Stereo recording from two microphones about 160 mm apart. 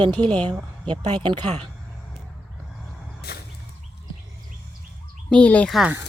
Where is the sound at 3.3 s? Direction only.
80° left.